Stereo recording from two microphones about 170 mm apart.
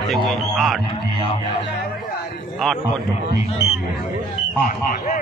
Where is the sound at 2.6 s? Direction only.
Centre (ahead or behind).